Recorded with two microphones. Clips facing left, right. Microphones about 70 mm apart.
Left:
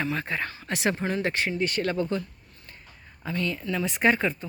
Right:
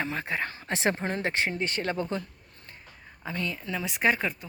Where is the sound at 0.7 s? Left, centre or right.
Right.